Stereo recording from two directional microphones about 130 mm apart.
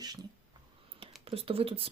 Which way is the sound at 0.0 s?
30° right (ahead or behind).